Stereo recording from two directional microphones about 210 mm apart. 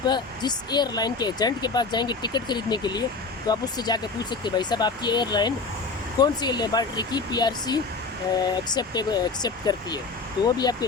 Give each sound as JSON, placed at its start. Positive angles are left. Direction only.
{"t": 0.0, "sound": "speech", "side_deg": 20}